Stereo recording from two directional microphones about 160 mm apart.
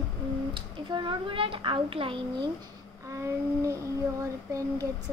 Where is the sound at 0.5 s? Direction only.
30° right (ahead or behind).